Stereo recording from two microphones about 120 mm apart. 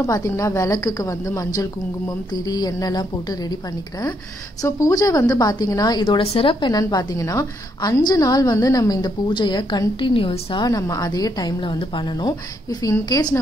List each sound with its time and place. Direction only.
0.0 s a woman's voice: 30° left (ahead or behind)
4.6 s a woman's voice: 25° left (ahead or behind)
6.2 s a woman's voice: 50° left (ahead or behind)
6.7 s a woman's voice: 35° left (ahead or behind)
10.6 s a woman's voice: 30° left (ahead or behind)